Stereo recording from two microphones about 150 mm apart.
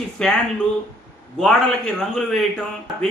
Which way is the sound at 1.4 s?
5° left (ahead or behind).